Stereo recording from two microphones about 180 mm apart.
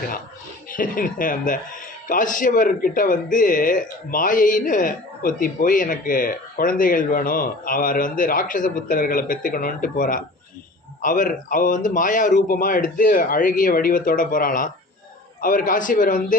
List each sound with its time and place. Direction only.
0.7 s speech: 50° left (ahead or behind)